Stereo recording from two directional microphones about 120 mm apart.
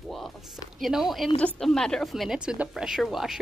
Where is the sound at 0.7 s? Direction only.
Centre (ahead or behind).